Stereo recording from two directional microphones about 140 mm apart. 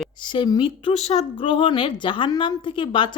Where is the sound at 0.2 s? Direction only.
35° left (ahead or behind).